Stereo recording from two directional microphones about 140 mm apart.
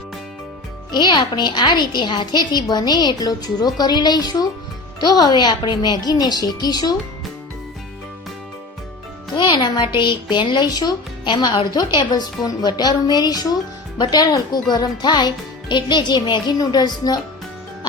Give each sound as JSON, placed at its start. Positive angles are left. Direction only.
{"t": 0.9, "sound": "a woman's voice", "side_deg": 30}
{"t": 9.3, "sound": "a woman's voice", "side_deg": 35}